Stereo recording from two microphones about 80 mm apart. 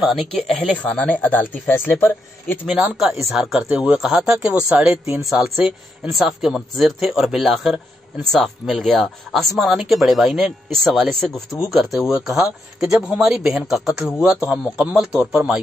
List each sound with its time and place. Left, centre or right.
0.0 s speech: centre
0.8 s speech: centre
2.6 s speech: centre